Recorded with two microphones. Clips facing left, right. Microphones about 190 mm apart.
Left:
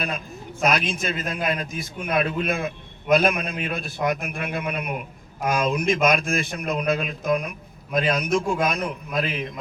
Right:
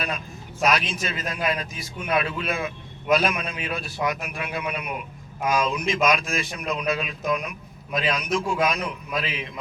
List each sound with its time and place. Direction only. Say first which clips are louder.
0.6 s a man's voice: left 1 dB; 50° left (ahead or behind)